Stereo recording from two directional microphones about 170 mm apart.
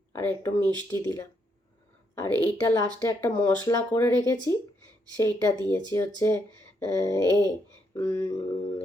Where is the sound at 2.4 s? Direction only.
15° left (ahead or behind).